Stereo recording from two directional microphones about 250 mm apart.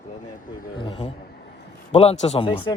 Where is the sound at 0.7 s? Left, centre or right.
Centre.